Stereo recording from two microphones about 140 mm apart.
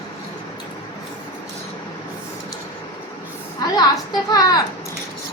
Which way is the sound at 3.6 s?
30° left (ahead or behind).